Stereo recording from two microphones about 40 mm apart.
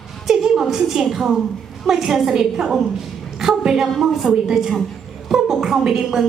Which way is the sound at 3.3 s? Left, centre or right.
Centre.